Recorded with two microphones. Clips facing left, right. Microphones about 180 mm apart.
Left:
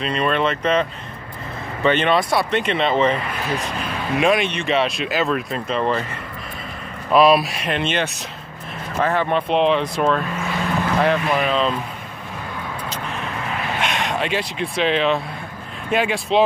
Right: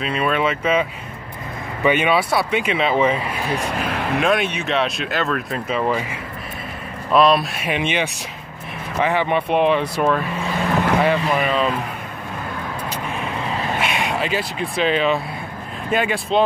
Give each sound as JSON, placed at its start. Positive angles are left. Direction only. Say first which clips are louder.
{"t": 0.0, "sound": "speech", "louder": "even", "side_deg": -5}
{"t": 3.9, "sound": "vehicle", "louder": "left 1 dB", "side_deg": -65}
{"t": 4.2, "sound": "speech", "louder": "left 3 dB", "side_deg": 0}
{"t": 7.1, "sound": "speech", "louder": "left 1 dB", "side_deg": 5}
{"t": 13.7, "sound": "speech", "louder": "left 1 dB", "side_deg": -5}